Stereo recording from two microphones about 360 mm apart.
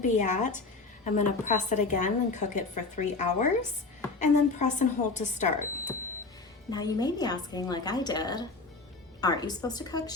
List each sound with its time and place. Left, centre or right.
0.0 s a woman's voice: centre
6.7 s a woman's voice: centre